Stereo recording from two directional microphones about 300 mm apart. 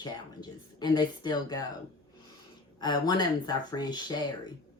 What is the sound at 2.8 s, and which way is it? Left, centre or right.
Speech, centre.